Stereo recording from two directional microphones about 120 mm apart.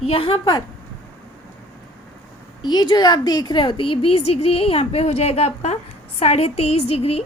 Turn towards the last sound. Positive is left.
turn(degrees=55)  # may be behind; listen again after turning